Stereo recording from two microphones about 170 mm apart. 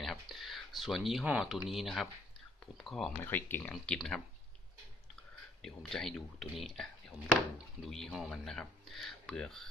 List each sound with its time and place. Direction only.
0.0 s speech: centre (ahead or behind)
5.6 s speech: centre (ahead or behind)